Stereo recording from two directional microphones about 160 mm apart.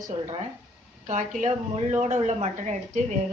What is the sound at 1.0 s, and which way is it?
A woman's voice, 50° right (ahead or behind).